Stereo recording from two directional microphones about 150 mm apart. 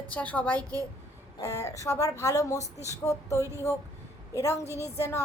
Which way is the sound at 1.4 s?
20° left (ahead or behind).